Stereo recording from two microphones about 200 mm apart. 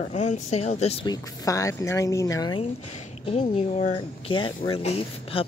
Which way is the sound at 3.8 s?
35° left (ahead or behind).